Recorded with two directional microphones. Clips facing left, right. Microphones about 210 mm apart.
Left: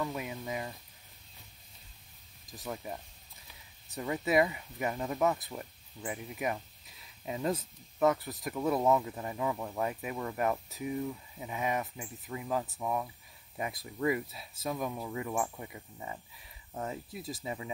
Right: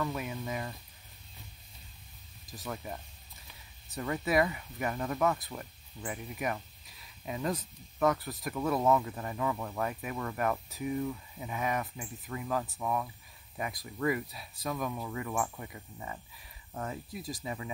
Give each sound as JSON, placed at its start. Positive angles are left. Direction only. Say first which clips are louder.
{"t": 0.0, "sound": "speech", "louder": "right 1 dB", "side_deg": 15}
{"t": 2.6, "sound": "speech", "louder": "even", "side_deg": 15}